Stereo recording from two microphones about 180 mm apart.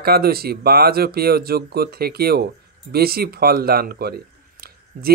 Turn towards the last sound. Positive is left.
turn(degrees=-60)  # may be behind; listen again after turning